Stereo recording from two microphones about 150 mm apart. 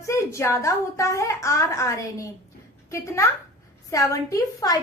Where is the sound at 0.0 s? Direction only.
20° left (ahead or behind).